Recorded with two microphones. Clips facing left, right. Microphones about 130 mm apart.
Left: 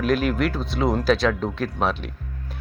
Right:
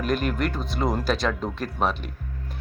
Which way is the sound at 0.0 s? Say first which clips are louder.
Left 4 dB; centre (ahead or behind).